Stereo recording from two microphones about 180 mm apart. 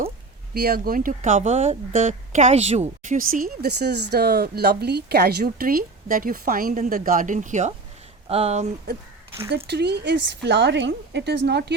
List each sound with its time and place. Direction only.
0.5 s speech: 60° right (ahead or behind); by 8.6 s 35° right (ahead or behind)
9.6 s a woman's voice: 70° right (ahead or behind)